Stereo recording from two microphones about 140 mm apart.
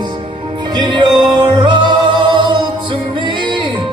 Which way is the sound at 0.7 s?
35° right (ahead or behind).